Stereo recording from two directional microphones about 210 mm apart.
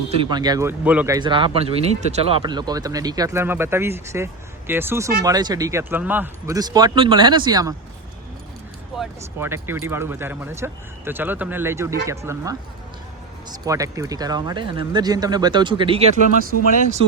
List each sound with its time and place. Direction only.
0.1 s speech: 25° right (ahead or behind)
9.0 s speech: 10° right (ahead or behind)
13.7 s speech: 15° right (ahead or behind)